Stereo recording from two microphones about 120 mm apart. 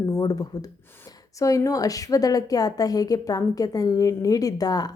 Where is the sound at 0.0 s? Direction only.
30° left (ahead or behind).